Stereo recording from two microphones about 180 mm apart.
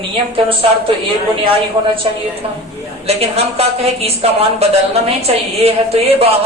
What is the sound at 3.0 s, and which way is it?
A woman's voice, 35° right (ahead or behind).